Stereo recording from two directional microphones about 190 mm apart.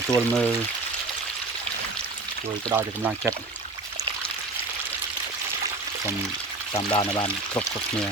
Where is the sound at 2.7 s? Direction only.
10° right (ahead or behind).